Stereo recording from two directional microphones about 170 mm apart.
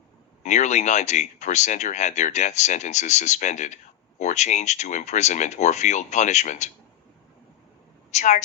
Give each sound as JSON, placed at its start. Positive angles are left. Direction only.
{"t": 0.4, "sound": "speech", "side_deg": 45}
{"t": 8.1, "sound": "speech", "side_deg": 45}